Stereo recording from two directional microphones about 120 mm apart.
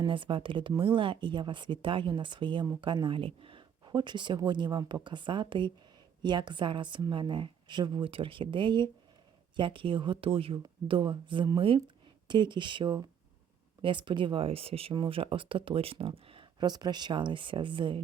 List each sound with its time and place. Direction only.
0.0 s speech: 45° right (ahead or behind)